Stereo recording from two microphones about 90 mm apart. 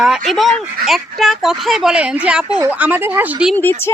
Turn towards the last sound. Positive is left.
turn(degrees=20)  # may be behind; listen again after turning